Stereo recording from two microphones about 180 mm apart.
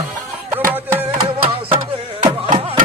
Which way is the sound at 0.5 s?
10° right (ahead or behind).